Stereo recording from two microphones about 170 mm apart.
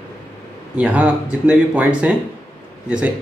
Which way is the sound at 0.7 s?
5° right (ahead or behind).